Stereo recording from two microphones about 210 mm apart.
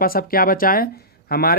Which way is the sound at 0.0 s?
45° left (ahead or behind).